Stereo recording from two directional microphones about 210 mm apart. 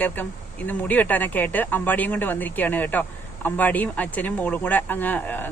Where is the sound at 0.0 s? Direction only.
10° left (ahead or behind).